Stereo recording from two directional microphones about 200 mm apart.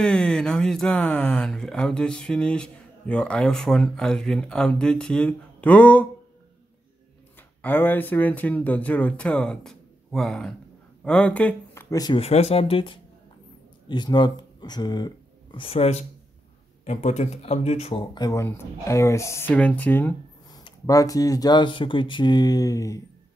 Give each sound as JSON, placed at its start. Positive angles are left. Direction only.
{"t": 0.0, "sound": "speech", "side_deg": 5}
{"t": 7.6, "sound": "speech", "side_deg": 10}